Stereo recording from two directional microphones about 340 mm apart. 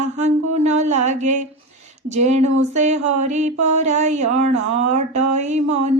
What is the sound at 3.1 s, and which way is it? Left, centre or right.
Mantra, right.